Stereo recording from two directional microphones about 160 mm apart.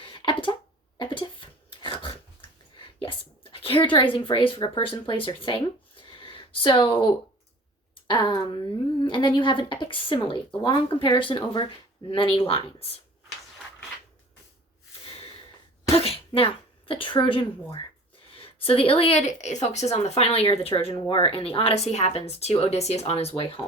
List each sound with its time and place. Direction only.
0.0 s a sound: 30° left (ahead or behind)
8.0 s a woman's voice: 30° left (ahead or behind)
15.0 s snort: 35° left (ahead or behind)
16.0 s a woman's voice: 35° left (ahead or behind)